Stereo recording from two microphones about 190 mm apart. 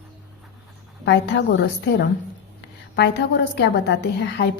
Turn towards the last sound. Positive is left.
turn(degrees=65)  # may be behind; listen again after turning